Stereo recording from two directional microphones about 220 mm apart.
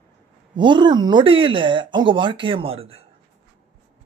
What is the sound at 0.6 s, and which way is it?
Speech, 20° right (ahead or behind).